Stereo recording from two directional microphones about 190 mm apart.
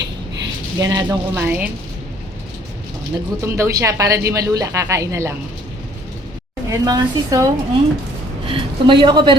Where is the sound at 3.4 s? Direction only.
15° right (ahead or behind).